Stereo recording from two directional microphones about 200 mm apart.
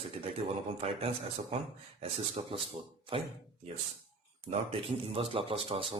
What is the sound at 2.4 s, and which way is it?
Speech, 25° right (ahead or behind).